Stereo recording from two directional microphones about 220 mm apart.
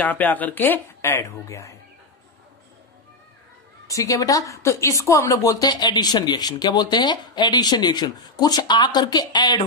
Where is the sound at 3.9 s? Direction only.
15° left (ahead or behind).